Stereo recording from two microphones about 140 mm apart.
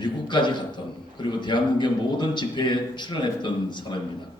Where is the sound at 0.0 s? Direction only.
35° left (ahead or behind).